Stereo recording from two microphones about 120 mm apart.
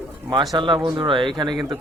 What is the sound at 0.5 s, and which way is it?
Speech, 40° right (ahead or behind).